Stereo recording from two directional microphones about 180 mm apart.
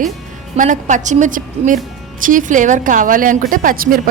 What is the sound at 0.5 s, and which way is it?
A woman's voice, 45° right (ahead or behind).